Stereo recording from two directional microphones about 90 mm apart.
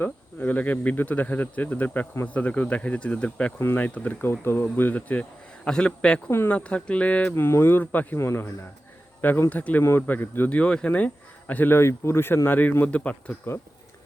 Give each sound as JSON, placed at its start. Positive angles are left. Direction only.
{"t": 0.0, "sound": "speech", "side_deg": 20}